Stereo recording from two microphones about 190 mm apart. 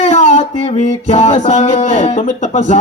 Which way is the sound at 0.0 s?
35° left (ahead or behind).